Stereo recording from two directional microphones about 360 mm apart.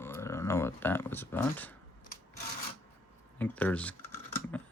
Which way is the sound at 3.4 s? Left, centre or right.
Centre.